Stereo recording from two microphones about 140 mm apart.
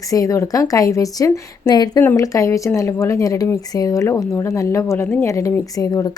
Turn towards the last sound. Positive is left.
turn(degrees=25)  # may be behind; listen again after turning